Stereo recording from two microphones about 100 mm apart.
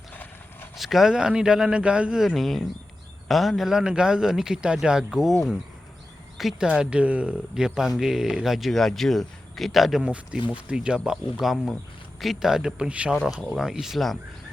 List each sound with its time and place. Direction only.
0.1 s horse: 20° left (ahead or behind)
0.8 s speech: 5° right (ahead or behind)
10.0 s speech: 10° right (ahead or behind)